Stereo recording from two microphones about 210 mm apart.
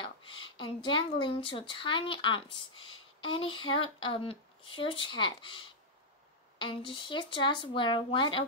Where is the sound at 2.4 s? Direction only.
75° left (ahead or behind).